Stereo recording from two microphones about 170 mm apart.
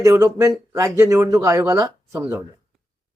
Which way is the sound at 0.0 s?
15° right (ahead or behind).